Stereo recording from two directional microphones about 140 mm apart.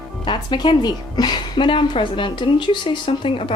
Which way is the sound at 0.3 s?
30° left (ahead or behind).